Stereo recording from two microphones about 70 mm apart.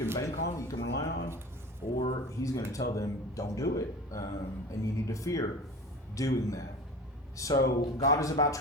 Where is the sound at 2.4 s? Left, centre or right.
Left.